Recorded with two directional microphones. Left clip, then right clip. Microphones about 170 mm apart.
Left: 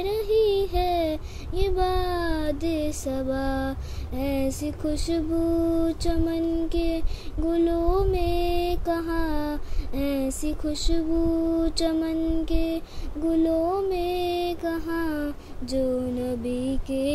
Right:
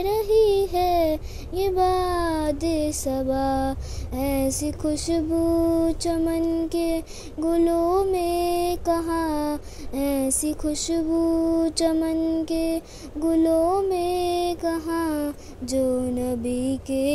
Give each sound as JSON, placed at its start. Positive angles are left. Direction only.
{"t": 0.0, "sound": "a child's voice", "side_deg": -20}